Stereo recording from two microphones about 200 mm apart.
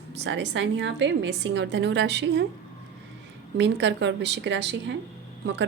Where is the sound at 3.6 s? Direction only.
60° right (ahead or behind).